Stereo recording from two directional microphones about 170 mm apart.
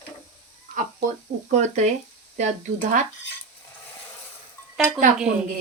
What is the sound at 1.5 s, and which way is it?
Speech, 45° right (ahead or behind).